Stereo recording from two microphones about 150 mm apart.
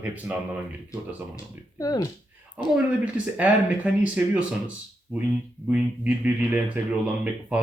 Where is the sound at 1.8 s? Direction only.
25° left (ahead or behind).